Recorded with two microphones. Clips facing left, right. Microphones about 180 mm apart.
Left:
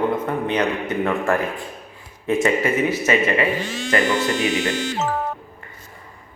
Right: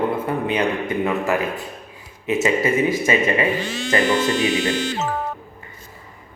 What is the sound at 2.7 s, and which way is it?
Speech, 10° right (ahead or behind).